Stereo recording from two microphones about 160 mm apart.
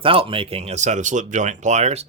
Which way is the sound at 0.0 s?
35° right (ahead or behind).